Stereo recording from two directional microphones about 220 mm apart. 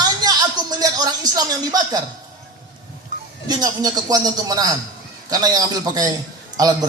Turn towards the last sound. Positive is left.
turn(degrees=-15)  # may be behind; listen again after turning